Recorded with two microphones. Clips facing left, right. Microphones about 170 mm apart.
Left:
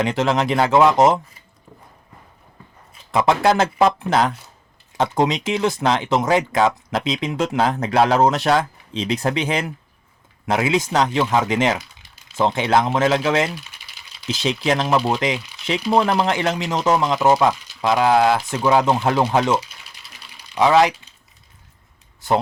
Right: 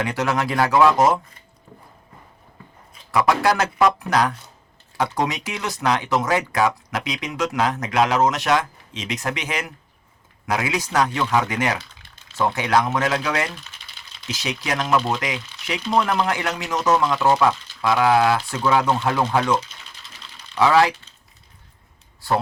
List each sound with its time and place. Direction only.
0.0 s speech: 20° left (ahead or behind)
3.1 s speech: 25° left (ahead or behind)
13.5 s typing: 10° left (ahead or behind)
14.3 s speech: 25° left (ahead or behind)
19.5 s typing: 10° left (ahead or behind)